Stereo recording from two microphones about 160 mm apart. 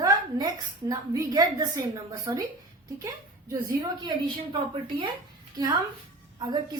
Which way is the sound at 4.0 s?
30° right (ahead or behind).